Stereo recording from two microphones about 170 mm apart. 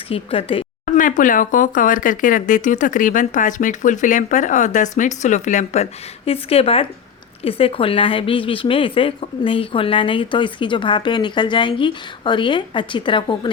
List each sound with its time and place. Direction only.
0.1 s speech: 35° left (ahead or behind)
0.9 s a woman's voice: 50° left (ahead or behind); by 13.5 s 30° left (ahead or behind)